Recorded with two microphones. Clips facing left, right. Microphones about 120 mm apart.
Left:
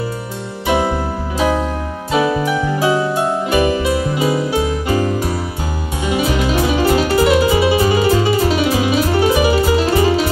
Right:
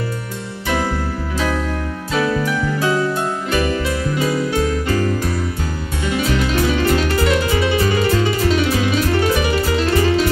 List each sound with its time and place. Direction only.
0.7 s music: 20° left (ahead or behind)
2.1 s music: 15° left (ahead or behind)